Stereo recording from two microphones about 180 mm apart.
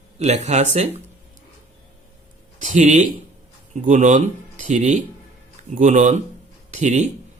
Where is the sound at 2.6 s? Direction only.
45° right (ahead or behind).